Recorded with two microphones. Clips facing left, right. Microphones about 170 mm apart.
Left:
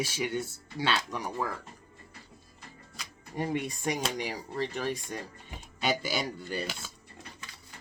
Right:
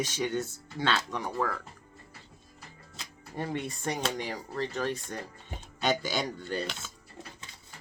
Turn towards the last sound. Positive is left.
turn(degrees=10)  # may be behind; listen again after turning